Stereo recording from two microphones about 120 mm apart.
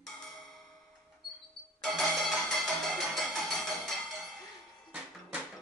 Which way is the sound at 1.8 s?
5° left (ahead or behind).